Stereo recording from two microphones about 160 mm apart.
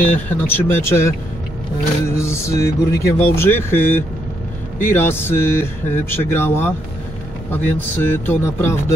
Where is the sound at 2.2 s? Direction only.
15° left (ahead or behind).